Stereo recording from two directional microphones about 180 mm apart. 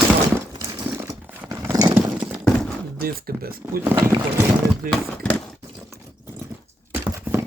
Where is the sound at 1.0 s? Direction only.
15° right (ahead or behind).